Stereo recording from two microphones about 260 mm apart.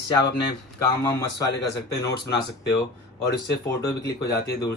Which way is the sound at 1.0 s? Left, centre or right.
Centre.